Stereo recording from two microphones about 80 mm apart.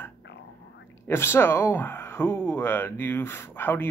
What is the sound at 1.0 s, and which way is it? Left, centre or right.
Speech, left.